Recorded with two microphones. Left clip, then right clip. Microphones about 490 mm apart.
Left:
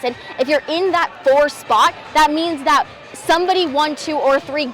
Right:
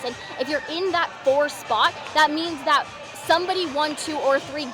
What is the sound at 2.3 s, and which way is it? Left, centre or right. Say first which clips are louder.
A woman's voice: left 6 dB; left.